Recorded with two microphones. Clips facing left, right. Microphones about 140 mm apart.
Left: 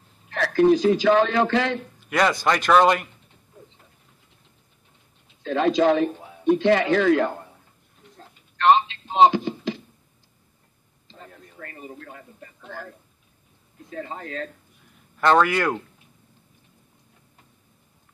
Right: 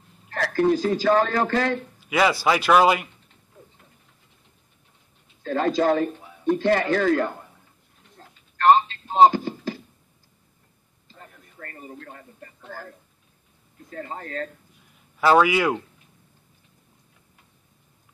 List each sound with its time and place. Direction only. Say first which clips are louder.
0.5 s speech: left 4 dB; 20° left (ahead or behind)
2.0 s speech: right 1 dB; 5° right (ahead or behind)
5.4 s a man's voice: left 2 dB; 20° left (ahead or behind)
8.6 s telephone: right 1 dB; 20° left (ahead or behind)
11.6 s speech: even; 15° left (ahead or behind)
13.8 s speech: left 1 dB; 15° left (ahead or behind)
15.1 s speech: right 1 dB; 5° right (ahead or behind)